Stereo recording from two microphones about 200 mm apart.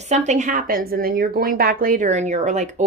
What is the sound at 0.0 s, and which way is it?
A woman's voice, 35° right (ahead or behind).